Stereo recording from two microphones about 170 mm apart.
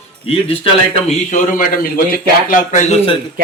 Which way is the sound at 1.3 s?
50° left (ahead or behind).